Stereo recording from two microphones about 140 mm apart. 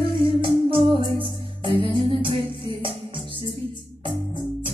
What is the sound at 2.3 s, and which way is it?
Music, 40° right (ahead or behind).